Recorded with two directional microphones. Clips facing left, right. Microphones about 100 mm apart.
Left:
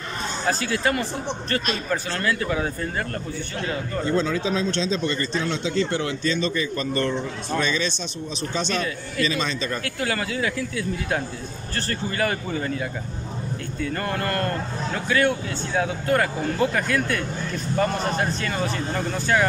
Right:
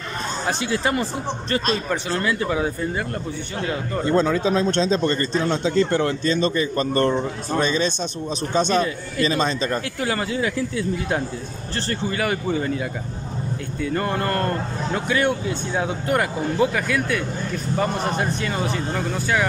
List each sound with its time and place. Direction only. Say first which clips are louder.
0.5 s speech: even; 20° right (ahead or behind)
2.0 s speech: right 4 dB; 20° right (ahead or behind)
4.1 s a man's voice: right 5 dB; 45° right (ahead or behind)
9.8 s speech: right 2 dB; 25° right (ahead or behind)
13.9 s speech: right 4 dB; 25° right (ahead or behind)
16.7 s speech: right 1 dB; 5° right (ahead or behind)
17.7 s speech: even; 20° right (ahead or behind)